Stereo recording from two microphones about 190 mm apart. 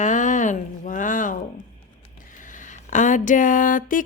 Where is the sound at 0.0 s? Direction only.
40° left (ahead or behind).